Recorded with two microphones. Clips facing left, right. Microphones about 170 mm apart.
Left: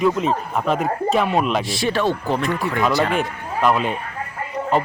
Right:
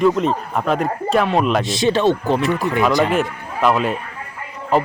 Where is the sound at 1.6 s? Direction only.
20° right (ahead or behind).